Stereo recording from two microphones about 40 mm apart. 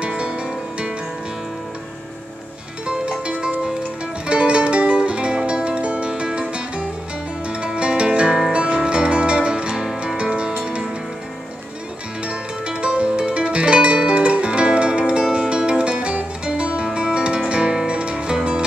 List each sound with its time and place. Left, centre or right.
0.2 s music: right
2.9 s music: right
12.3 s music: right